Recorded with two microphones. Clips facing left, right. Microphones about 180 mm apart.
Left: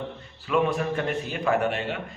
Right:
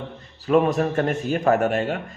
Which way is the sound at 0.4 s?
40° right (ahead or behind).